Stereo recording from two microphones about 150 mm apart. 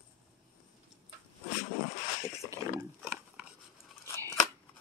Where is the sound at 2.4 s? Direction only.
25° left (ahead or behind).